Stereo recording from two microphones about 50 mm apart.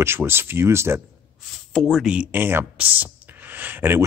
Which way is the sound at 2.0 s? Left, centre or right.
Right.